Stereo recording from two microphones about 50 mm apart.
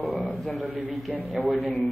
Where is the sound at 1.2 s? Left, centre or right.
Right.